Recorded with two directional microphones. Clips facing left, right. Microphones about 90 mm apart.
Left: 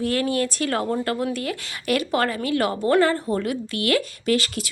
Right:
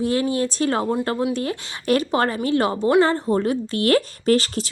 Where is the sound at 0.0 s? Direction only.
20° right (ahead or behind).